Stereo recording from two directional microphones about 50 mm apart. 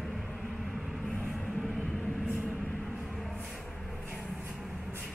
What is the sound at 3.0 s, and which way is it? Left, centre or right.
Music, centre.